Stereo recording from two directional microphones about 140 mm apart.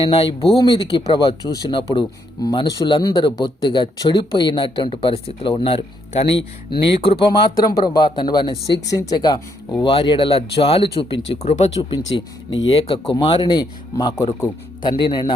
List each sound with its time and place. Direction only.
0.0 s speech: 45° left (ahead or behind)
0.6 s speech: 30° left (ahead or behind)
7.9 s speech: 35° left (ahead or behind); by 11.7 s 50° left (ahead or behind)
11.8 s speech: 30° left (ahead or behind)